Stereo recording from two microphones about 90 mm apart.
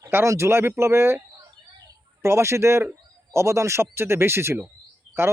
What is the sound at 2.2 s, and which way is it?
Speech, 30° right (ahead or behind).